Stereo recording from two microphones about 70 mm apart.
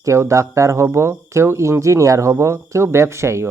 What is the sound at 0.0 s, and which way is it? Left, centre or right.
Speech, right.